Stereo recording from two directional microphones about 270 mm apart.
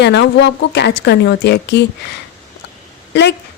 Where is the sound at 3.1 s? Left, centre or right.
Left.